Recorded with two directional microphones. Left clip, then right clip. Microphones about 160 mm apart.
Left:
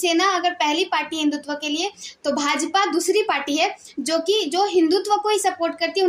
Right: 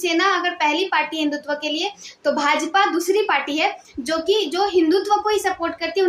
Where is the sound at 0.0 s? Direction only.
35° left (ahead or behind).